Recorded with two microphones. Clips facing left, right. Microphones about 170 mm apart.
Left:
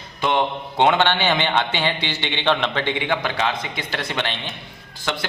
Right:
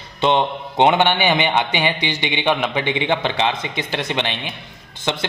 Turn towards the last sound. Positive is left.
turn(degrees=-20)  # may be behind; listen again after turning